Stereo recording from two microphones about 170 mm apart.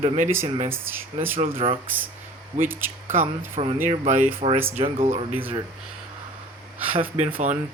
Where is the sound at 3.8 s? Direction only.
50° right (ahead or behind).